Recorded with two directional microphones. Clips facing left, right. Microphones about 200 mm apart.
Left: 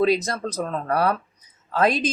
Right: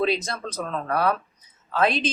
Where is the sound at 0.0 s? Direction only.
40° left (ahead or behind).